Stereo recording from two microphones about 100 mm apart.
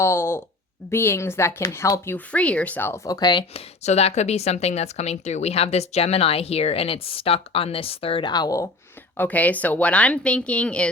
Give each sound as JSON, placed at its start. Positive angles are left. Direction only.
{"t": 0.0, "sound": "speech", "side_deg": 25}
{"t": 2.1, "sound": "a woman's voice", "side_deg": 15}
{"t": 3.2, "sound": "speech", "side_deg": 45}
{"t": 3.5, "sound": "speech", "side_deg": 90}
{"t": 8.3, "sound": "speech", "side_deg": 40}
{"t": 9.1, "sound": "a woman's voice", "side_deg": 15}